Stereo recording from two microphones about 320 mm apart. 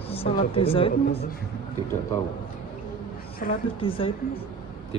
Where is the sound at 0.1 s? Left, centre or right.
Centre.